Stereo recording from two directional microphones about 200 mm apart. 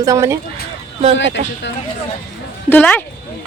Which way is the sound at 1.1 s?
65° left (ahead or behind).